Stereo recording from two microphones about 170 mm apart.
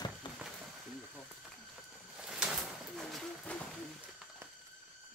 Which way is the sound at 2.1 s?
5° right (ahead or behind).